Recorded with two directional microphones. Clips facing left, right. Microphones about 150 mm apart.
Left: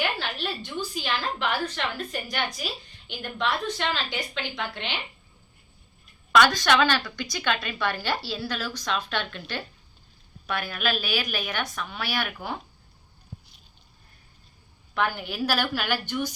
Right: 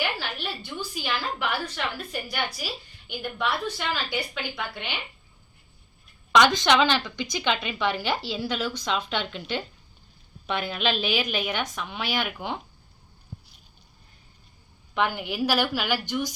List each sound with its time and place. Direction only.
0.2 s a woman's voice: 10° right (ahead or behind)
6.3 s a woman's voice: 20° right (ahead or behind)
14.9 s a woman's voice: 15° right (ahead or behind)